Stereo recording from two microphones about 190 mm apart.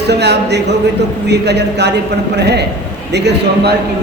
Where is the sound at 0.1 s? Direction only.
60° right (ahead or behind).